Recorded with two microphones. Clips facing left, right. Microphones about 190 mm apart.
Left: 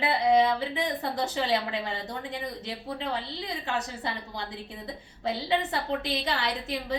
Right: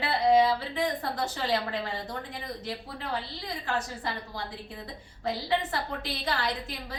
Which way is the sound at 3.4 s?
20° left (ahead or behind).